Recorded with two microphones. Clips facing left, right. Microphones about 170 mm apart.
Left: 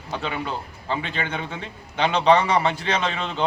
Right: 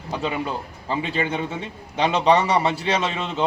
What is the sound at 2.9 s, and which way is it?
Speech, 5° right (ahead or behind).